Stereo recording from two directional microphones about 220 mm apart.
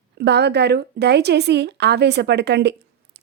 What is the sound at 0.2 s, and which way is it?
Speech, 50° right (ahead or behind).